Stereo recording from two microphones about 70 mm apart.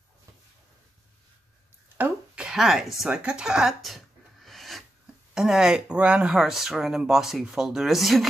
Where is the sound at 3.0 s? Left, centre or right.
Centre.